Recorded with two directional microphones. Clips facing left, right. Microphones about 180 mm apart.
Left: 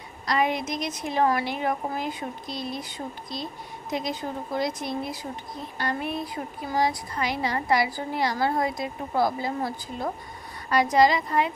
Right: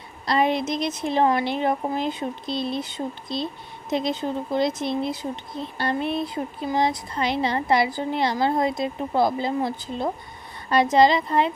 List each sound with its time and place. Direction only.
0.3 s speech: 30° right (ahead or behind)